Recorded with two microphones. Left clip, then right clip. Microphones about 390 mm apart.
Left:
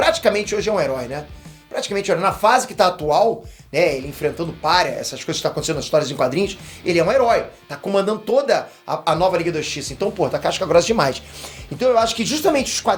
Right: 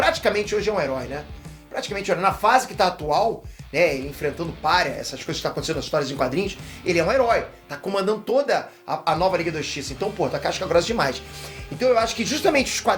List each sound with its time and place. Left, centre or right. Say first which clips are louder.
0.0 s speech: left 4 dB; left
11.8 s speech: left 3 dB; left